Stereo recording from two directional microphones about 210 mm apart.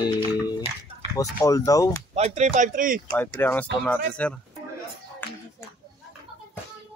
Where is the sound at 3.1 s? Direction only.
10° left (ahead or behind).